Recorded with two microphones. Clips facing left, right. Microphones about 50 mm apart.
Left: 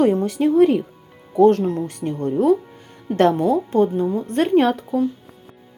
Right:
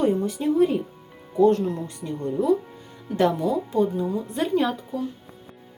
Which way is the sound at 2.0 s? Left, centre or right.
Left.